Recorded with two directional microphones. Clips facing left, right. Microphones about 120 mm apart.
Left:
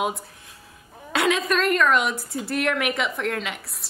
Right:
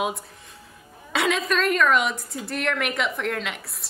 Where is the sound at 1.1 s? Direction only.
Centre (ahead or behind).